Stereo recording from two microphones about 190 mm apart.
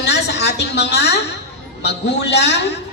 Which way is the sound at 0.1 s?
65° left (ahead or behind).